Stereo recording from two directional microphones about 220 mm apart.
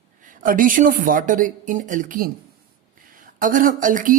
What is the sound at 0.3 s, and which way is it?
Speech, 40° right (ahead or behind).